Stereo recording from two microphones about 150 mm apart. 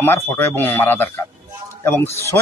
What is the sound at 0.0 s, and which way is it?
Speech, 15° left (ahead or behind).